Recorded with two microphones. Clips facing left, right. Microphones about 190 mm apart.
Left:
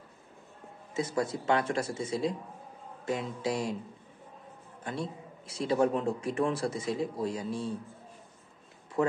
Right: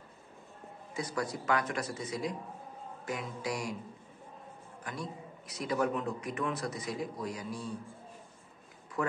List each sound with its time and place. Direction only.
0.9 s a man's voice: 25° left (ahead or behind)
4.8 s a man's voice: 30° left (ahead or behind)